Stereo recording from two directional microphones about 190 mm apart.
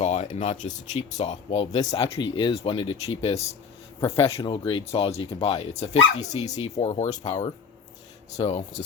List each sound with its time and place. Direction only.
0.0 s speech: 35° left (ahead or behind)
7.1 s speech: 20° left (ahead or behind)
8.3 s speech: 35° left (ahead or behind)